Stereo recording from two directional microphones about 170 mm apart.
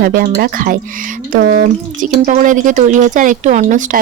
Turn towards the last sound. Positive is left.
turn(degrees=-50)  # may be behind; listen again after turning